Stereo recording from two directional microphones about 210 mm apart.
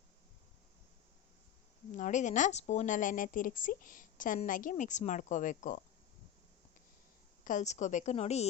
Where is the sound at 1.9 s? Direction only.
35° left (ahead or behind).